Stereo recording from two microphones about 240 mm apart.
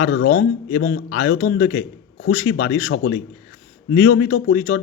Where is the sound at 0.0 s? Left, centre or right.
Left.